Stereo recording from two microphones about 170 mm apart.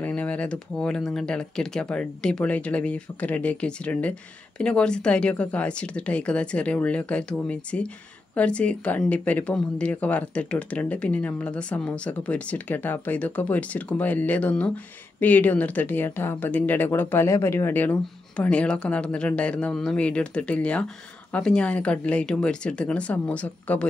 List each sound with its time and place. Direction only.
0.0 s speech: 10° left (ahead or behind)